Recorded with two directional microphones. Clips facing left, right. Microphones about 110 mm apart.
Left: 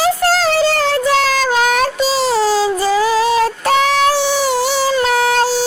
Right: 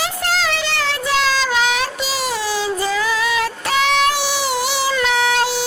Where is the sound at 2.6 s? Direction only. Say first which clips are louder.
Left 6 dB; 35° left (ahead or behind).